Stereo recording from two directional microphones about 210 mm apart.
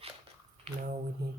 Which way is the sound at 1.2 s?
50° right (ahead or behind).